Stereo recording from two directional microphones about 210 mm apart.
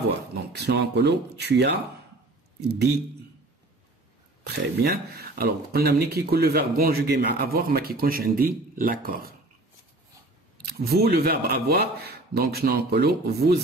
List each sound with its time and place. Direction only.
0.6 s speech: 55° right (ahead or behind)
4.5 s speech: 50° right (ahead or behind)
10.8 s speech: 50° right (ahead or behind)